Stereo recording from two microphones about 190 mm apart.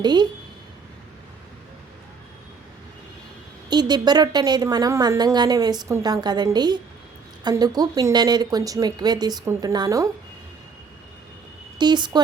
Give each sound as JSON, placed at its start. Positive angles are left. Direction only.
{"t": 0.0, "sound": "a woman's voice", "side_deg": -20}
{"t": 3.7, "sound": "a woman's voice", "side_deg": -20}
{"t": 11.8, "sound": "a woman's voice", "side_deg": -25}